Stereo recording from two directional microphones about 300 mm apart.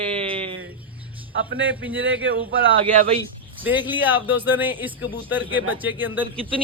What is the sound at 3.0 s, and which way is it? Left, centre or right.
Speech, centre.